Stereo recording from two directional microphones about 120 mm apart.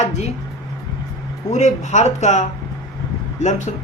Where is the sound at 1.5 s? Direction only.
75° left (ahead or behind).